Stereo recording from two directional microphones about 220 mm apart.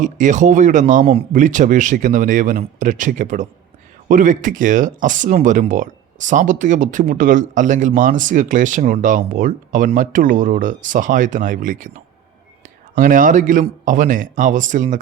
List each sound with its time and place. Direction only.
0.0 s speech: 35° right (ahead or behind)
13.0 s speech: 35° right (ahead or behind)